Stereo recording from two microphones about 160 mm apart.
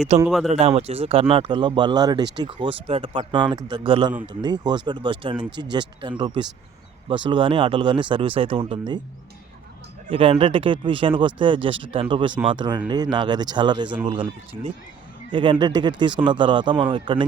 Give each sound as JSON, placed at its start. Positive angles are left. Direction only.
{"t": 0.1, "sound": "speech", "side_deg": -45}
{"t": 10.1, "sound": "speech", "side_deg": -35}